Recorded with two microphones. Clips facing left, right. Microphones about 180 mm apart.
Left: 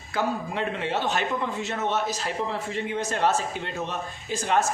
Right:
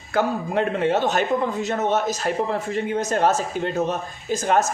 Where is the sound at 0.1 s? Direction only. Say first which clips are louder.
Right 5 dB; 50° right (ahead or behind).